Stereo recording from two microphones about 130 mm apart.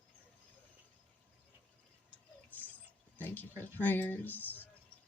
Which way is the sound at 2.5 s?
15° left (ahead or behind).